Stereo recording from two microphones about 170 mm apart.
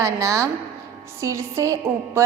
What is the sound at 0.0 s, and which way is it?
Speech, 20° right (ahead or behind).